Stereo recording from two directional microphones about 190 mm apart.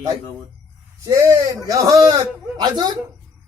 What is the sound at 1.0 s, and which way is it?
Speech, 20° right (ahead or behind).